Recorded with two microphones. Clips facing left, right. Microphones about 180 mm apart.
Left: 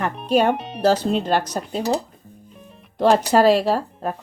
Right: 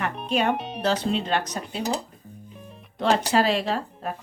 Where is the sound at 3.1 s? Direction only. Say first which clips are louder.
Left 6 dB; 45° left (ahead or behind).